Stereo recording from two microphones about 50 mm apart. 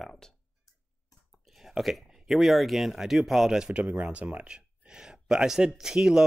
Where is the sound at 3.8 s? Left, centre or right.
Right.